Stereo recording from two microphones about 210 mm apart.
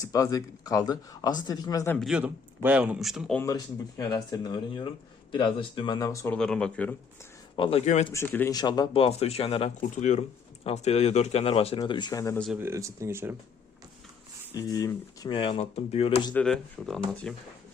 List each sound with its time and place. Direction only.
0.0 s speech: 15° left (ahead or behind)
2.0 s speech: 5° right (ahead or behind)
3.4 s speech: 15° left (ahead or behind)
7.5 s speech: 25° left (ahead or behind)
8.1 s speech: 10° left (ahead or behind)
12.6 s speech: 15° right (ahead or behind)
14.5 s speech: 15° left (ahead or behind)
16.3 s speech: 5° left (ahead or behind)